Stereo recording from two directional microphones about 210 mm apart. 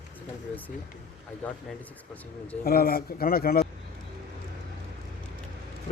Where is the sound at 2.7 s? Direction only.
45° left (ahead or behind).